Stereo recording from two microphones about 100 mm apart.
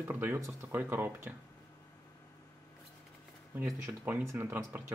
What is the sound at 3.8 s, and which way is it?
Speech, 25° right (ahead or behind).